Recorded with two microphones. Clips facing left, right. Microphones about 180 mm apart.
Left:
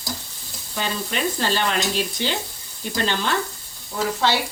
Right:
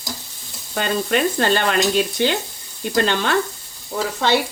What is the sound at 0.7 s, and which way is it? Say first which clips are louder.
Sizzle: right 7 dB; 60° right (ahead or behind).